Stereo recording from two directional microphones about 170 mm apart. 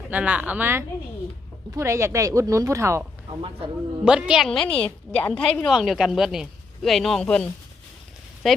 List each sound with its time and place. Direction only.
0.1 s speech: 10° right (ahead or behind)
4.0 s a woman's voice: 5° right (ahead or behind)
8.4 s a woman's voice: centre (ahead or behind)